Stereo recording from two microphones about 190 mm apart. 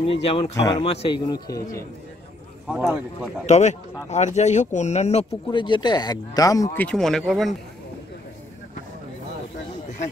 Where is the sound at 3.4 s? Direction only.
35° left (ahead or behind).